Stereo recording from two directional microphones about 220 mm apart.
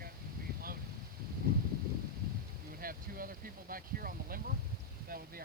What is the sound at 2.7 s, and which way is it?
Speech, 40° right (ahead or behind).